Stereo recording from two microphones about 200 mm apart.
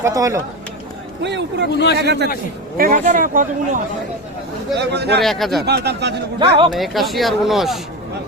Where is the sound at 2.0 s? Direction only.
55° right (ahead or behind).